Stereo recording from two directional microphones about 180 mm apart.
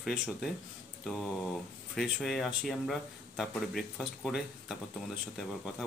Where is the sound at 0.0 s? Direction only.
Centre (ahead or behind).